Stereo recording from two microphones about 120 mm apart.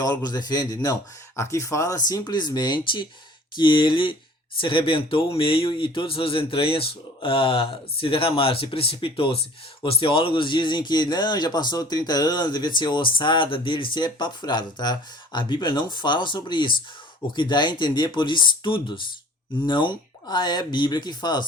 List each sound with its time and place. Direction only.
0.0 s speech: 35° left (ahead or behind)